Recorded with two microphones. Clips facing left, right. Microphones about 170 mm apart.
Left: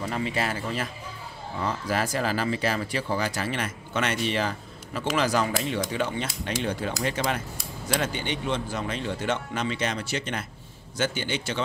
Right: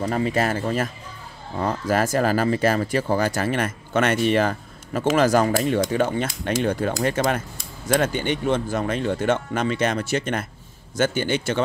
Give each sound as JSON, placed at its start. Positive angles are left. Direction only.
{"t": 0.0, "sound": "speech", "side_deg": -45}